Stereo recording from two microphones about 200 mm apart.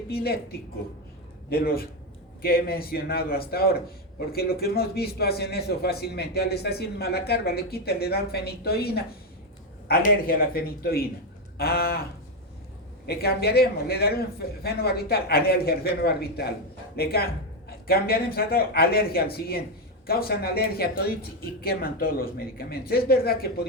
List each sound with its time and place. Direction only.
0.1 s a man's voice: 50° left (ahead or behind)
13.1 s a man's voice: 50° left (ahead or behind)